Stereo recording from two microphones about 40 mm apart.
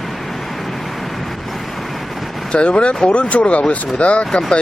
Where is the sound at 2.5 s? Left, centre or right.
Left.